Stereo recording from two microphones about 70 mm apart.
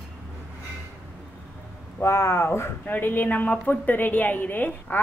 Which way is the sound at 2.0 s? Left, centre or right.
Left.